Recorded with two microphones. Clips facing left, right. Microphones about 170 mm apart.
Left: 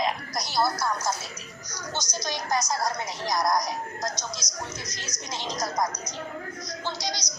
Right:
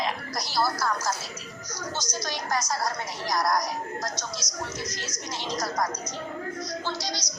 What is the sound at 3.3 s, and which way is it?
A woman's voice, 20° left (ahead or behind).